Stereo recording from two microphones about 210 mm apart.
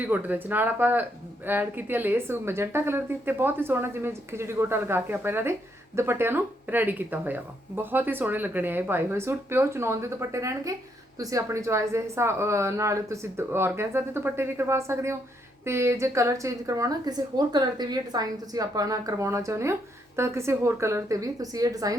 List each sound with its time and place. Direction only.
0.0 s speech: 10° right (ahead or behind)